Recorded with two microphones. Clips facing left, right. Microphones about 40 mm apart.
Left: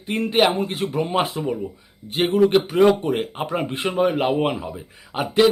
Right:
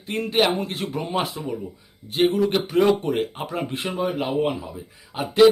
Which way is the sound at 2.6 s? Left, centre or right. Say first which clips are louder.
Left 3 dB; centre.